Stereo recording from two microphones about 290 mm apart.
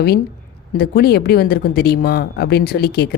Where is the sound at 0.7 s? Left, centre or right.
Left.